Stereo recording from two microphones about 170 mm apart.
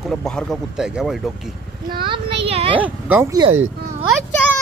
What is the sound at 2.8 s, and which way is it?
Speech, 10° right (ahead or behind).